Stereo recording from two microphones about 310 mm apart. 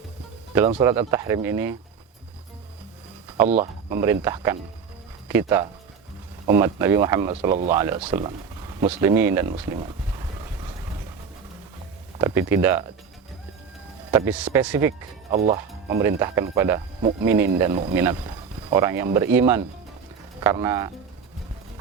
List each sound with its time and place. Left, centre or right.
0.7 s speech: centre
3.6 s speech: centre
12.2 s speech: centre
14.1 s speech: centre
15.3 s speech: right
15.9 s speech: centre